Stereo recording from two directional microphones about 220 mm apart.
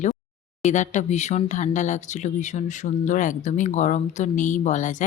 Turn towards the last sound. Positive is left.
turn(degrees=35)  # may be behind; listen again after turning